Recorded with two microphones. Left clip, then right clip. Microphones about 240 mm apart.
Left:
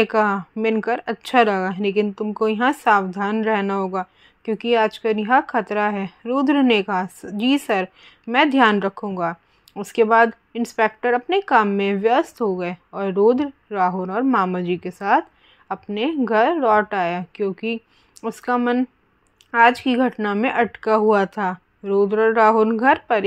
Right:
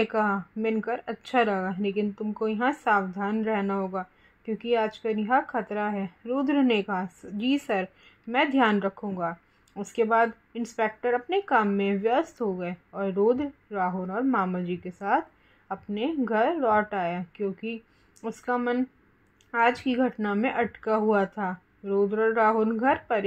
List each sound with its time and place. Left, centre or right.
0.0 s speech: centre